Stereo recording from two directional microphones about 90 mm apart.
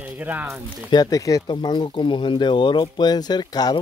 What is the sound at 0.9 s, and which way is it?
Speech, 45° left (ahead or behind).